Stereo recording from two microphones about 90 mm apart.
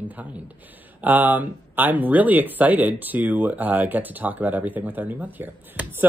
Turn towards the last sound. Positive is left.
turn(degrees=-20)  # may be behind; listen again after turning